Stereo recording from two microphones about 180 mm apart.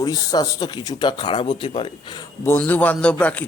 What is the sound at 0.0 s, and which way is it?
Speech, 20° left (ahead or behind).